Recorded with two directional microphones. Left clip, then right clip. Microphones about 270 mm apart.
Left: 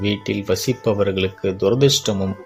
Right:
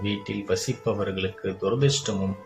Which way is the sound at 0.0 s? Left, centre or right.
Left.